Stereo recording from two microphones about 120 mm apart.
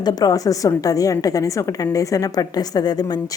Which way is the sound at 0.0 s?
30° left (ahead or behind).